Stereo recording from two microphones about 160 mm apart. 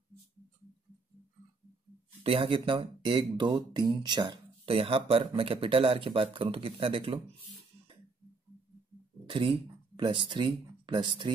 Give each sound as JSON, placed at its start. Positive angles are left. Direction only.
{"t": 2.2, "sound": "speech", "side_deg": -35}
{"t": 9.2, "sound": "speech", "side_deg": -30}